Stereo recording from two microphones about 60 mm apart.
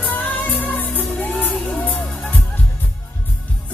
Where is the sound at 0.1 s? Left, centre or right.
Left.